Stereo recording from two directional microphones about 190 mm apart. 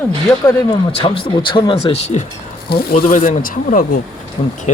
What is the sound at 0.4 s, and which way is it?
Speech, 25° left (ahead or behind).